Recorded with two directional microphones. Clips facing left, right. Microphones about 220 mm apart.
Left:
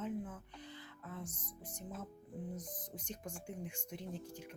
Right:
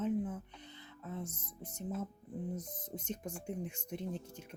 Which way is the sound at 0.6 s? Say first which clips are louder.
Right 1 dB; 25° right (ahead or behind).